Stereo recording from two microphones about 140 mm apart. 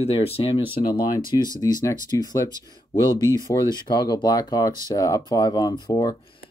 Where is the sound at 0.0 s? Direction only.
45° left (ahead or behind).